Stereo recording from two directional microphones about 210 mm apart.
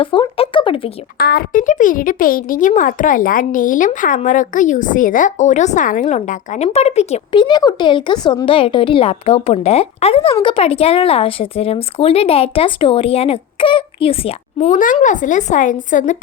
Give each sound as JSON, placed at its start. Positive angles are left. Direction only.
{"t": 0.0, "sound": "speech", "side_deg": 25}
{"t": 1.2, "sound": "a woman's voice", "side_deg": 45}